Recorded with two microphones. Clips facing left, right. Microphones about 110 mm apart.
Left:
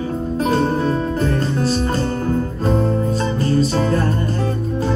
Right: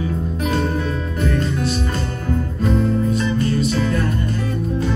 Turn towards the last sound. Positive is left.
turn(degrees=35)  # may be behind; listen again after turning